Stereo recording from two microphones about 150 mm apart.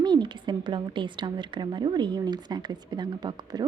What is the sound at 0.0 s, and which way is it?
A woman's voice, 30° right (ahead or behind).